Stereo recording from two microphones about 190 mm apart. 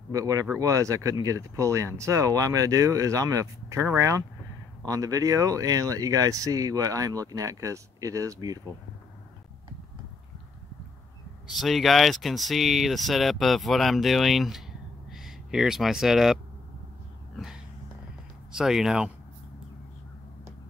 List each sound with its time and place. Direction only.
0.1 s speech: 15° right (ahead or behind)
11.4 s speech: centre (ahead or behind)
18.5 s speech: 5° right (ahead or behind)